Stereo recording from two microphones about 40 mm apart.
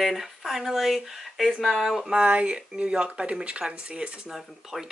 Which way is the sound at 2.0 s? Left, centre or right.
Right.